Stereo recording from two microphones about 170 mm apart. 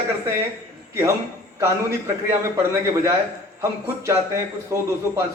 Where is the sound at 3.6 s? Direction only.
15° right (ahead or behind).